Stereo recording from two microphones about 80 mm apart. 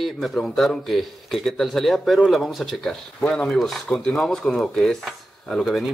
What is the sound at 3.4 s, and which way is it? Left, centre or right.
Speech, centre.